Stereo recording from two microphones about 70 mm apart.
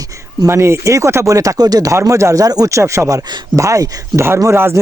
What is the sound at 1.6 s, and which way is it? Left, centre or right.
Speech, right.